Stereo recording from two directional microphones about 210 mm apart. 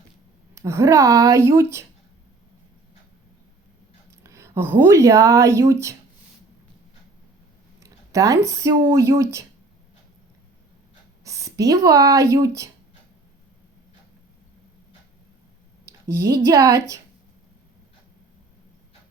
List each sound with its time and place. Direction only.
0.5 s speech: 15° right (ahead or behind)
4.2 s speech: 15° right (ahead or behind)
7.8 s a sound: 15° right (ahead or behind)
8.9 s speech: 15° right (ahead or behind)
11.2 s speech: 15° right (ahead or behind)
15.9 s speech: 15° right (ahead or behind)